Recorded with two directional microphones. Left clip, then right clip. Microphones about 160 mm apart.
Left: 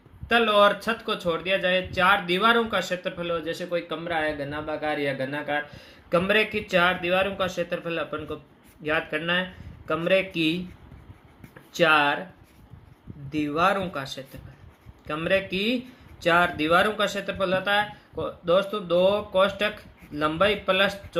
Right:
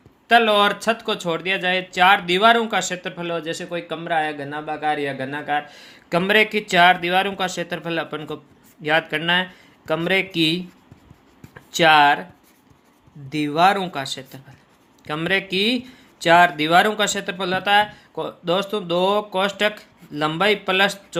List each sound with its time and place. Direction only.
0.3 s speech: 45° right (ahead or behind)
11.7 s speech: 50° right (ahead or behind)
13.3 s speech: 50° right (ahead or behind)